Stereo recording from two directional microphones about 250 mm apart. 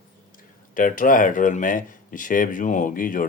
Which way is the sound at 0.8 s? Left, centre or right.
Left.